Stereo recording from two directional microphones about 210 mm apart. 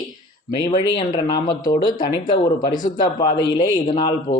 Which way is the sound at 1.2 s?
20° left (ahead or behind).